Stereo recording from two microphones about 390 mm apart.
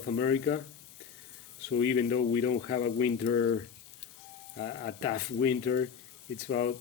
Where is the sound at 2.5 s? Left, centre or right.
Centre.